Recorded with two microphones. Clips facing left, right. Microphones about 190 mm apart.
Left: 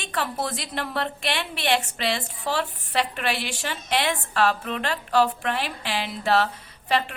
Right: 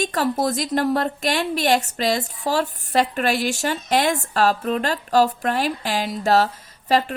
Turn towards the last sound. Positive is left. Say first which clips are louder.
# right 5 dB
turn(degrees=-40)  # may be behind; listen again after turning